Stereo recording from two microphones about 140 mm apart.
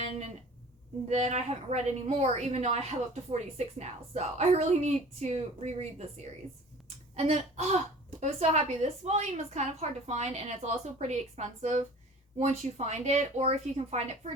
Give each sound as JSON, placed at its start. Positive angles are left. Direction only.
{"t": 1.0, "sound": "a woman's voice", "side_deg": -55}
{"t": 7.2, "sound": "a woman's voice", "side_deg": -50}